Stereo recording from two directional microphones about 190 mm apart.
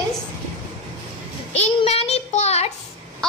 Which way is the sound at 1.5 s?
35° left (ahead or behind).